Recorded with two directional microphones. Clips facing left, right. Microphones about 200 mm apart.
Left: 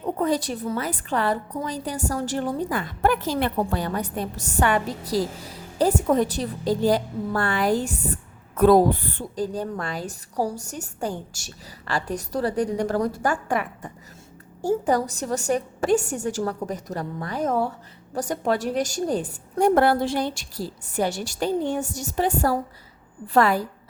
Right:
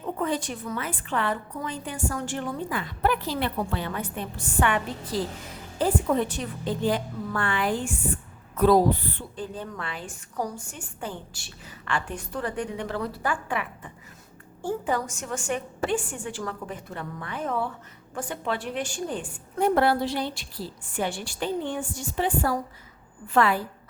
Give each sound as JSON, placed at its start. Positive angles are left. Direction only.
{"t": 0.0, "sound": "a woman's voice", "side_deg": 40}